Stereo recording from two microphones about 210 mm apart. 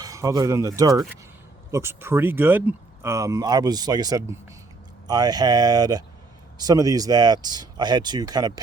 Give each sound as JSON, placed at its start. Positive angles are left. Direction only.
{"t": 0.0, "sound": "speech", "side_deg": -15}